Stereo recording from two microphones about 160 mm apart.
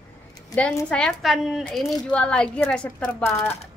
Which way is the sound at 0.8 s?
5° left (ahead or behind).